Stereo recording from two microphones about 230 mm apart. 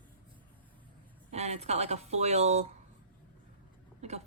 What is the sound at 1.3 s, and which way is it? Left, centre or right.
Speech, right.